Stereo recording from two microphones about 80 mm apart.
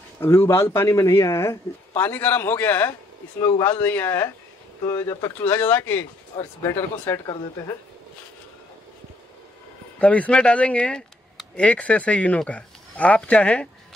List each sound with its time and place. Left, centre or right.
0.2 s a man's voice: left
3.3 s a man's voice: left
5.4 s a man's voice: left
6.3 s speech: left
7.1 s a man's voice: left
9.9 s speech: centre